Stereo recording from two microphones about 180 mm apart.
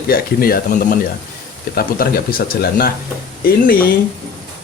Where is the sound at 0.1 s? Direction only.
55° left (ahead or behind).